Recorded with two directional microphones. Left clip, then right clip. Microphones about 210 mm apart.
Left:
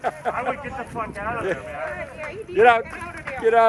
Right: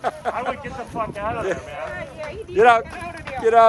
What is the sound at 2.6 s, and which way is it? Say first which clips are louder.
Speech: right 1 dB; 10° right (ahead or behind).